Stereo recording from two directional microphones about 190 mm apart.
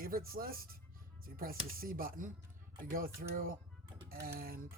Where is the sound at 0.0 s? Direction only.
50° right (ahead or behind).